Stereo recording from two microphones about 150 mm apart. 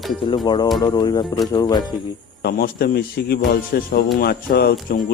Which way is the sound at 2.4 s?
90° left.